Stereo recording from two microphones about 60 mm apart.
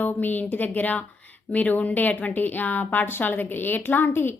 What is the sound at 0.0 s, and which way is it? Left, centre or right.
A woman's voice, left.